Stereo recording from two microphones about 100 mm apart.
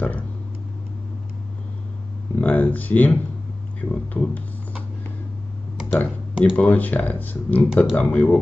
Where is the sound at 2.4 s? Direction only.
15° left (ahead or behind).